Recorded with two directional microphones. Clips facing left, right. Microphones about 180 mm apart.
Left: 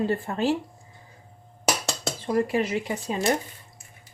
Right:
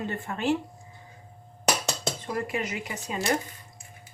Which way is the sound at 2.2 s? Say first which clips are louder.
Left 9 dB; 35° left (ahead or behind).